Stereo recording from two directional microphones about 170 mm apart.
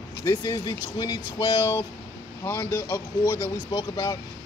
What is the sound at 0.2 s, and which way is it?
Speech, 20° left (ahead or behind).